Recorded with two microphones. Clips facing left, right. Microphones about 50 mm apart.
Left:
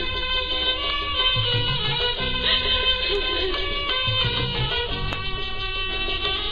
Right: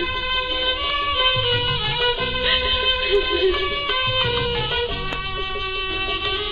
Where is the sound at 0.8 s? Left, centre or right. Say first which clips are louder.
Right 4 dB; right.